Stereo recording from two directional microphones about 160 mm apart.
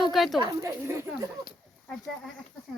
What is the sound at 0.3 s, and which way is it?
Speech, 25° right (ahead or behind).